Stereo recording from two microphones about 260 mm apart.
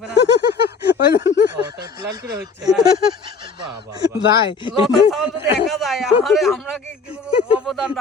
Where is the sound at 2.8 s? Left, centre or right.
Centre.